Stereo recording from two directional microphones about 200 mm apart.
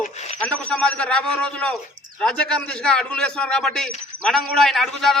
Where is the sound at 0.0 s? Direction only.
35° left (ahead or behind).